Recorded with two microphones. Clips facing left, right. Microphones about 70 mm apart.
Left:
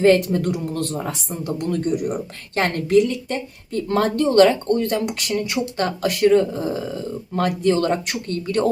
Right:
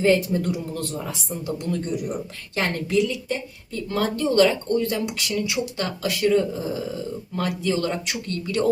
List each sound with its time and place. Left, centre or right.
0.0 s speech: left
0.9 s speech: left